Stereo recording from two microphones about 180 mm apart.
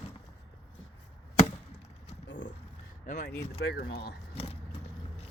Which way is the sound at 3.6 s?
65° left (ahead or behind).